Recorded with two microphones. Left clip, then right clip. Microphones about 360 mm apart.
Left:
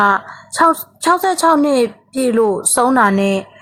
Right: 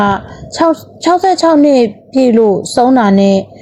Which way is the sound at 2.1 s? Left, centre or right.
Centre.